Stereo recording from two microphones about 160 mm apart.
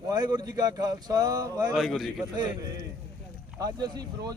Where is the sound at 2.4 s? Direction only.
25° right (ahead or behind).